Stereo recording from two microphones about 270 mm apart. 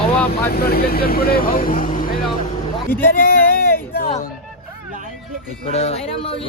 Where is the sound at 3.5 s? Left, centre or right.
Left.